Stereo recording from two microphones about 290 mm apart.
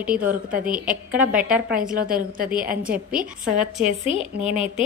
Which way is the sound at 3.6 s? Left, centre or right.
Centre.